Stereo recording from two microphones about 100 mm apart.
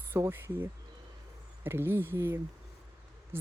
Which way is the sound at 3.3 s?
25° right (ahead or behind).